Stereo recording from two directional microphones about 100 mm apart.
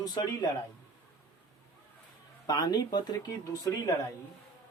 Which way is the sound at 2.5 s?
40° left (ahead or behind).